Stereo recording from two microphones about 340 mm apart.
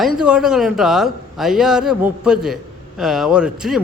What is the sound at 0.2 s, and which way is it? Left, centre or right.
A man's voice, centre.